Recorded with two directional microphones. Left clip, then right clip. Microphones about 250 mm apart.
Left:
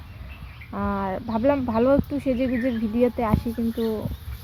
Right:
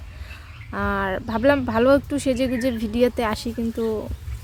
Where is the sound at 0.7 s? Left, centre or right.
Right.